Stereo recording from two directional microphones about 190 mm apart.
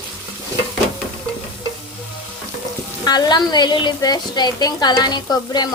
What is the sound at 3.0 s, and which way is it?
A woman's voice, 20° left (ahead or behind).